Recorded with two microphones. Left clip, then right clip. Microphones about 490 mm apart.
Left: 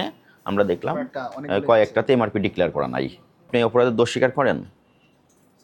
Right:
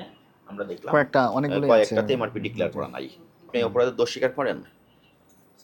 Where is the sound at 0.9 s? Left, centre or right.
Right.